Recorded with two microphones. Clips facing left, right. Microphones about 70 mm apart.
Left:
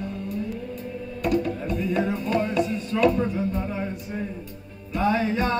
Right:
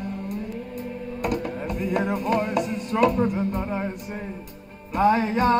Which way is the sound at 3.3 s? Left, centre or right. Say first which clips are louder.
Right 1 dB; right.